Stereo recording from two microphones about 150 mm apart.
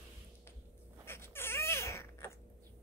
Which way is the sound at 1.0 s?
15° left (ahead or behind).